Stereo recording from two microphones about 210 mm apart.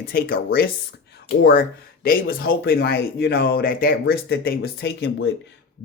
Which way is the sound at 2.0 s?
45° left (ahead or behind).